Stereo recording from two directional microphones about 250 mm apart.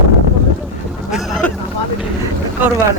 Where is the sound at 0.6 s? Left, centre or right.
Centre.